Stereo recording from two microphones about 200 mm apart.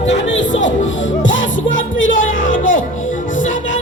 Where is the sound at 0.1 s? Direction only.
65° left (ahead or behind).